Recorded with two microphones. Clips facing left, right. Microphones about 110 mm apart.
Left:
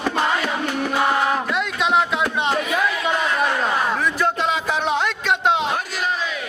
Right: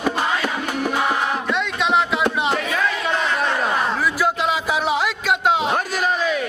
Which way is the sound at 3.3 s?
5° right (ahead or behind).